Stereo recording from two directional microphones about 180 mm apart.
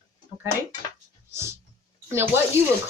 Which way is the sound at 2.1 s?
15° right (ahead or behind).